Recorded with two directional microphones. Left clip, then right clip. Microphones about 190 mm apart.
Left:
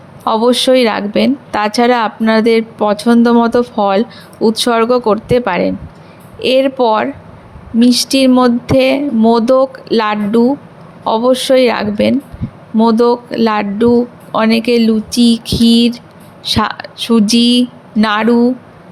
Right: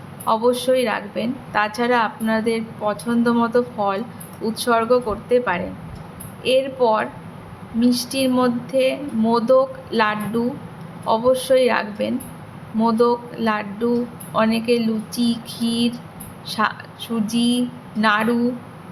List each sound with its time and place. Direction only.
0.3 s a woman's voice: 45° left (ahead or behind)